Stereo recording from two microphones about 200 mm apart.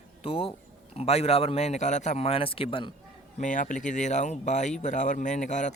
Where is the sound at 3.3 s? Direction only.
40° left (ahead or behind).